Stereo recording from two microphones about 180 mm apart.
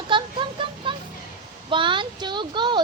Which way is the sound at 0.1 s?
25° right (ahead or behind).